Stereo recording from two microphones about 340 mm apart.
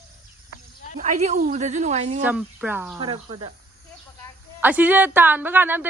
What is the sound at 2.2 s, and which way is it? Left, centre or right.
A woman's voice, centre.